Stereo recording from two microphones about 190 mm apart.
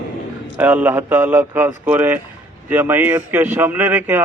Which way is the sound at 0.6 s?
10° right (ahead or behind).